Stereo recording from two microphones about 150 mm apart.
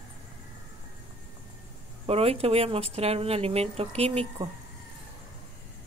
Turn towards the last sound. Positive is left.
turn(degrees=-40)  # may be behind; listen again after turning